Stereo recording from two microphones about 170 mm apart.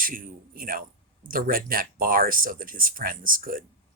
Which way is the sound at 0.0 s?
55° right (ahead or behind).